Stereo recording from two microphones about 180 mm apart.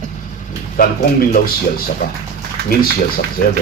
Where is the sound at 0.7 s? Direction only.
55° left (ahead or behind).